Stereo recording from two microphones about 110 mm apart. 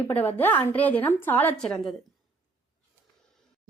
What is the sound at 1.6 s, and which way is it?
Speech, 5° left (ahead or behind).